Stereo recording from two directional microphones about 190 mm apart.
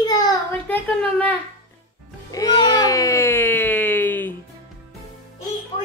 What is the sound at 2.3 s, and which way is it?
Cat, 20° left (ahead or behind).